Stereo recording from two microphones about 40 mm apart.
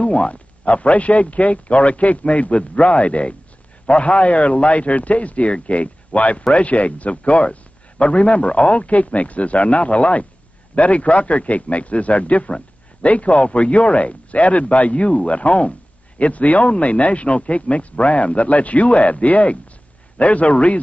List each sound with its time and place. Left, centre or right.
0.0 s speech: left